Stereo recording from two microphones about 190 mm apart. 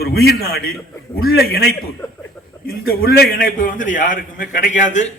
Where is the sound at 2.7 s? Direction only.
50° left (ahead or behind).